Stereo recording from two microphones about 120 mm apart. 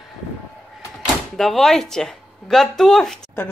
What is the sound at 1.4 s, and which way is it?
Speech, centre (ahead or behind).